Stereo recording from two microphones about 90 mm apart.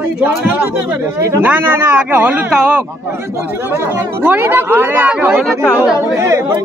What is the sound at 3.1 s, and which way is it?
A woman's voice, 30° right (ahead or behind).